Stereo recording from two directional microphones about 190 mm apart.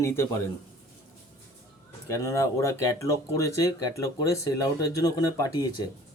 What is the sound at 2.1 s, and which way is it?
Speech, 15° left (ahead or behind).